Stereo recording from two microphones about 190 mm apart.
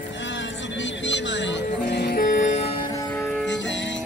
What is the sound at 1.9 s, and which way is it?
Music, 55° left (ahead or behind).